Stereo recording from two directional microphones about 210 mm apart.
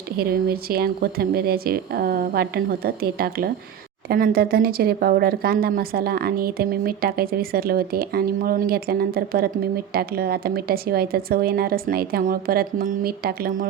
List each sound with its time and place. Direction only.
0.2 s a woman's voice: 45° right (ahead or behind)